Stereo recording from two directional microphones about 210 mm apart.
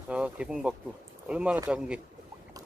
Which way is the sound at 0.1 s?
5° right (ahead or behind).